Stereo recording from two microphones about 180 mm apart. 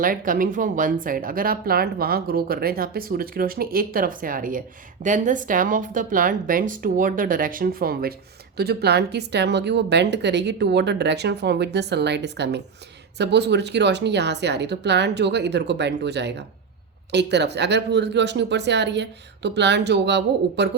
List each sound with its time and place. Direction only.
0.0 s a woman's voice: 50° right (ahead or behind); by 20.7 s 70° right (ahead or behind)